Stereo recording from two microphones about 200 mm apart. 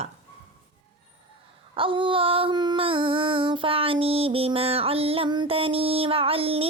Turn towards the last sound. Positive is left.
turn(degrees=-30)  # may be behind; listen again after turning